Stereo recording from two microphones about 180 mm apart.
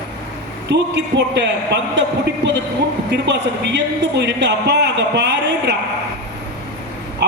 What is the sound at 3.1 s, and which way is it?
A man's voice, 75° right (ahead or behind).